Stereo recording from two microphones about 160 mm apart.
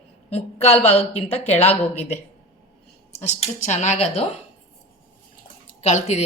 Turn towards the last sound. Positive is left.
turn(degrees=45)  # may be behind; listen again after turning